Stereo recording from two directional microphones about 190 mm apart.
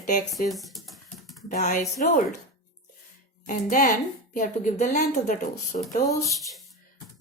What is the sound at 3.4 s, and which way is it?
Speech, 45° left (ahead or behind).